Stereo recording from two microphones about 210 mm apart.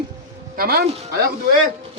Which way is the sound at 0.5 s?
45° right (ahead or behind).